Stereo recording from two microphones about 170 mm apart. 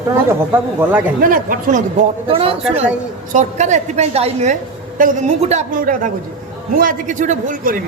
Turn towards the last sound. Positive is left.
turn(degrees=-55)  # may be behind; listen again after turning